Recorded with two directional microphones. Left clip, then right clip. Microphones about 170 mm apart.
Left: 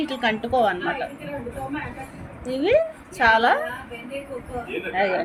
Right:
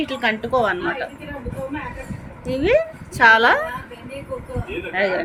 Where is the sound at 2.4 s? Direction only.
10° right (ahead or behind).